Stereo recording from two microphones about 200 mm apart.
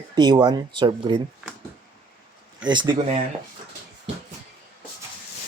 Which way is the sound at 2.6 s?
25° right (ahead or behind).